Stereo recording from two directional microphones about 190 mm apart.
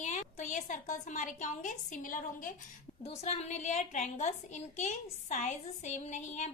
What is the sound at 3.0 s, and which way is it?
A woman's voice, 35° left (ahead or behind).